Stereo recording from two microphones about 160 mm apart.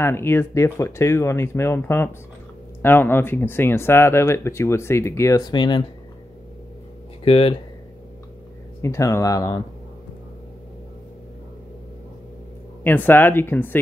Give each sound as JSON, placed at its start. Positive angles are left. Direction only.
{"t": 0.0, "sound": "speech", "side_deg": 15}
{"t": 7.2, "sound": "speech", "side_deg": 35}
{"t": 8.8, "sound": "speech", "side_deg": 20}
{"t": 12.8, "sound": "speech", "side_deg": 10}